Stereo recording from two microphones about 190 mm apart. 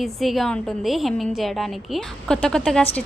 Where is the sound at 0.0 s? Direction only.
Centre (ahead or behind).